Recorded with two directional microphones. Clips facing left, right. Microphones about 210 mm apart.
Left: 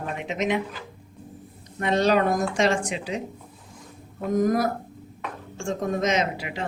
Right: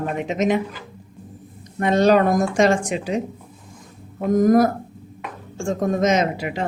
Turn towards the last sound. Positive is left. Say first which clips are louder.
# right 5 dB
turn(degrees=-45)  # may be behind; listen again after turning